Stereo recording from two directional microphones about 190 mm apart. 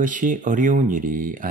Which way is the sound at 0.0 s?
45° right (ahead or behind).